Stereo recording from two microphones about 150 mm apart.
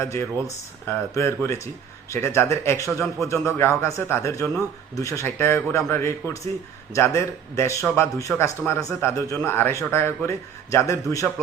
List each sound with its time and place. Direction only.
0.0 s a man's voice: 20° left (ahead or behind)